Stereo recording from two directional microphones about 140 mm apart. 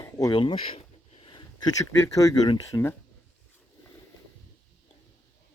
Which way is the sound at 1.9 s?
20° left (ahead or behind).